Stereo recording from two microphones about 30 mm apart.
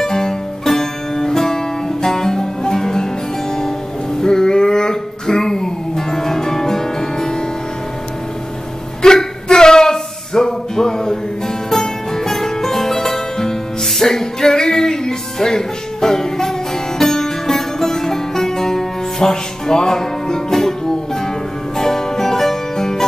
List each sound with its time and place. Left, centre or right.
0.0 s music: centre
9.0 s a sound: left
11.7 s music: centre